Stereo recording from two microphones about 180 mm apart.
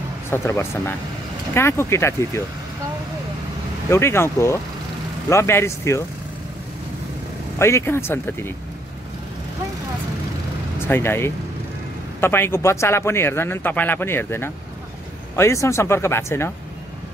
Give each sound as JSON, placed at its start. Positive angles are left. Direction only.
{"t": 0.3, "sound": "speech", "side_deg": 15}
{"t": 3.9, "sound": "speech", "side_deg": 15}
{"t": 7.5, "sound": "speech", "side_deg": 15}
{"t": 10.9, "sound": "speech", "side_deg": 15}